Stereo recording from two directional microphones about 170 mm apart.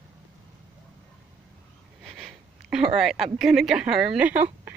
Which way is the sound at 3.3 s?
Centre (ahead or behind).